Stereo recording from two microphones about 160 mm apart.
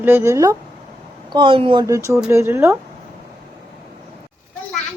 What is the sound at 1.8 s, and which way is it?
Speech, 20° right (ahead or behind).